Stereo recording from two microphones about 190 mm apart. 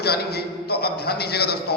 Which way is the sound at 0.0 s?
55° left (ahead or behind).